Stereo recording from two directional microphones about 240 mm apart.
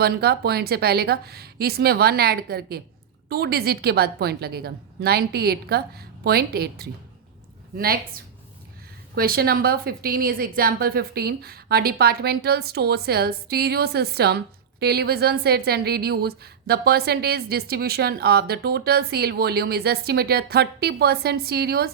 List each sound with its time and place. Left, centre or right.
0.0 s a woman's voice: right